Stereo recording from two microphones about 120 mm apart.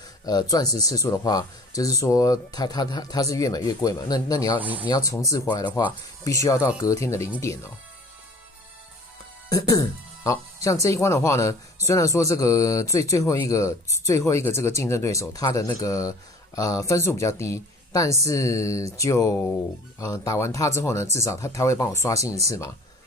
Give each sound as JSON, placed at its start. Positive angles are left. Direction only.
{"t": 0.2, "sound": "speech", "side_deg": 35}
{"t": 4.6, "sound": "speech", "side_deg": -15}
{"t": 4.8, "sound": "speech", "side_deg": 30}
{"t": 9.5, "sound": "speech", "side_deg": 30}